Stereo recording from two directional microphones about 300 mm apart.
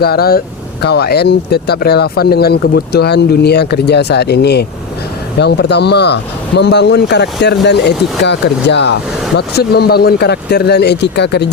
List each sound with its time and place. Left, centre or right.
0.0 s speech: left